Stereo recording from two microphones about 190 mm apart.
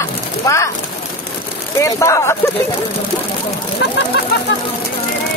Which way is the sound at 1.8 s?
15° left (ahead or behind).